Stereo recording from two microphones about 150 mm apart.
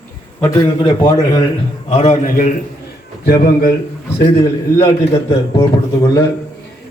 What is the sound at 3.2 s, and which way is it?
Speech, 90° left.